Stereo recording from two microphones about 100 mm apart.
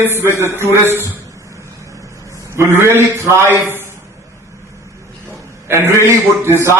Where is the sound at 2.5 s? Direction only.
25° right (ahead or behind).